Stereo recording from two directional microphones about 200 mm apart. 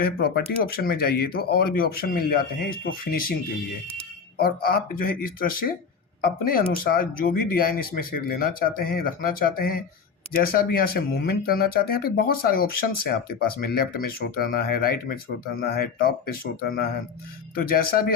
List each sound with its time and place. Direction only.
0.0 s speech: 50° left (ahead or behind)
4.4 s speech: 50° left (ahead or behind)